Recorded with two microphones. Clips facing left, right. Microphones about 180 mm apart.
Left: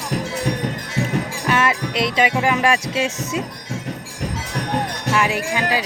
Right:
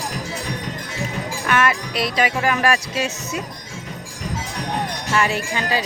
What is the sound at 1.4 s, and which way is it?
Music, 25° left (ahead or behind).